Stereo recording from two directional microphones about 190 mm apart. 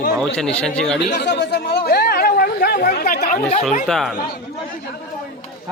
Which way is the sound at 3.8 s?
Centre (ahead or behind).